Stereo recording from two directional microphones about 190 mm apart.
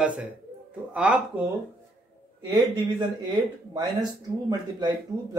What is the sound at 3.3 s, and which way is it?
Speech, 20° right (ahead or behind).